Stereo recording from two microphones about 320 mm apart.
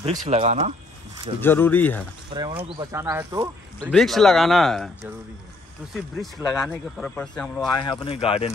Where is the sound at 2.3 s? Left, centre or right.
Centre.